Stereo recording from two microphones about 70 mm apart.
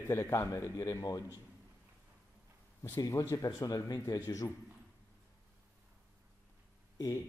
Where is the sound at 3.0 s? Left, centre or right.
Left.